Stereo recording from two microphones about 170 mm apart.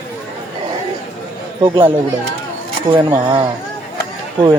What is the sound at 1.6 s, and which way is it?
Speech, 25° right (ahead or behind).